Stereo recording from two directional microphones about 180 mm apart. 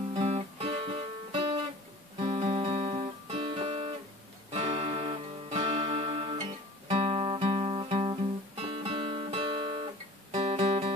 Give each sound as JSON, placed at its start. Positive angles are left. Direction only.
{"t": 0.1, "sound": "music", "side_deg": -35}
{"t": 2.1, "sound": "guitar", "side_deg": -30}
{"t": 4.5, "sound": "music", "side_deg": -35}